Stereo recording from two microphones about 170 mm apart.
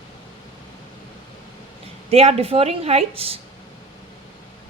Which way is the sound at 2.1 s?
35° right (ahead or behind).